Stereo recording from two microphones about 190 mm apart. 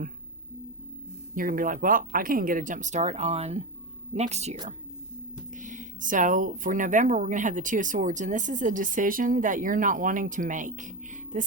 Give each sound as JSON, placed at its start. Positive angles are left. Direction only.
{"t": 1.4, "sound": "speech", "side_deg": -45}